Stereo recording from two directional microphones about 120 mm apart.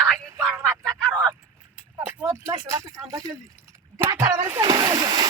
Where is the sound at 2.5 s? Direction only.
30° right (ahead or behind).